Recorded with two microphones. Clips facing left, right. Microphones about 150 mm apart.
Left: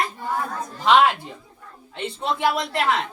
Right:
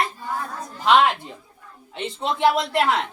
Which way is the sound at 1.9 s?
20° right (ahead or behind).